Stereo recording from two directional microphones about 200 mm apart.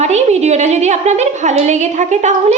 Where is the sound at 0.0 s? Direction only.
35° right (ahead or behind).